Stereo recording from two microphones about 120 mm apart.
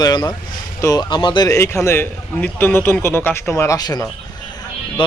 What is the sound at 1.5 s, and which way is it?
A man's voice, 25° left (ahead or behind).